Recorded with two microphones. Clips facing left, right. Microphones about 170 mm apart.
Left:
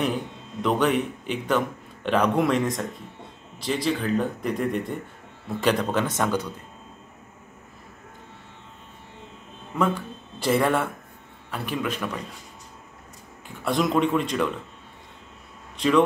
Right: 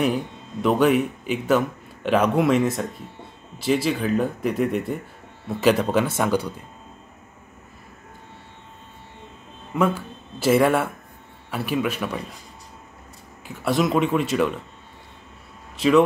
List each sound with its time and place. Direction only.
0.6 s speech: 5° right (ahead or behind)
9.8 s speech: 5° right (ahead or behind)
13.7 s speech: 5° right (ahead or behind)
15.8 s speech: 5° right (ahead or behind)